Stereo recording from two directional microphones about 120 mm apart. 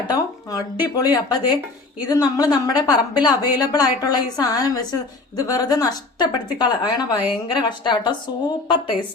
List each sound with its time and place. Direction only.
0.1 s a woman's voice: 30° left (ahead or behind)